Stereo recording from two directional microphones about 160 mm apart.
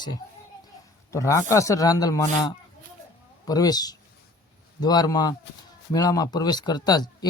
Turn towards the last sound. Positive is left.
turn(degrees=25)  # may be behind; listen again after turning